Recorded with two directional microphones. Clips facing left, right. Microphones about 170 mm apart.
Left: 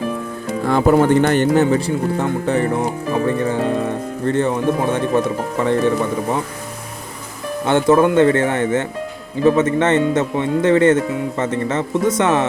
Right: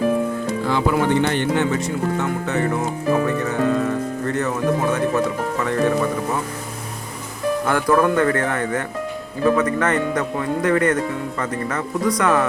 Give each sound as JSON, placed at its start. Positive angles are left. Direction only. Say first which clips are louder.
{"t": 0.7, "sound": "speech", "louder": "left 6 dB", "side_deg": 45}
{"t": 7.6, "sound": "speech", "louder": "left 5 dB", "side_deg": 25}